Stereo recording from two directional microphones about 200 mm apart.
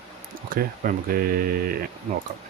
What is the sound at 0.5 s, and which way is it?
Speech, 45° right (ahead or behind).